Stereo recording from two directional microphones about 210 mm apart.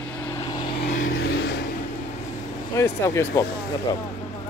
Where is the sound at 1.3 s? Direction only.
60° left (ahead or behind).